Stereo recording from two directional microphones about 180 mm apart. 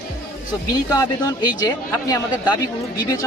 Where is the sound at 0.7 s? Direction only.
20° left (ahead or behind).